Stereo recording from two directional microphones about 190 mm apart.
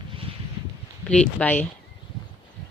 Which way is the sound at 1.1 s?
5° left (ahead or behind).